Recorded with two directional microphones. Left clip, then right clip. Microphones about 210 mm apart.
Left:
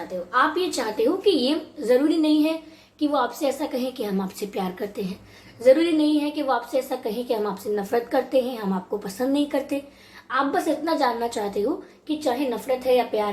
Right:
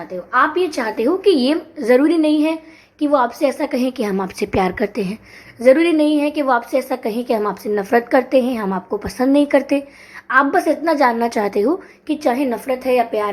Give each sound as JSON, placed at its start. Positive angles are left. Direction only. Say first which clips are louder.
{"t": 0.7, "sound": "a woman's voice", "louder": "right 4 dB", "side_deg": -30}